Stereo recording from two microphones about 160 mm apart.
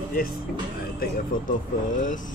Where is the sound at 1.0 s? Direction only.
55° left (ahead or behind).